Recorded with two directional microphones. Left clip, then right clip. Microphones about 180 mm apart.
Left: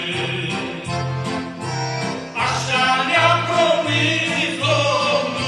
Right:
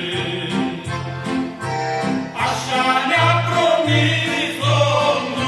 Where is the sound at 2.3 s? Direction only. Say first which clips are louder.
Left 1 dB; 45° right (ahead or behind).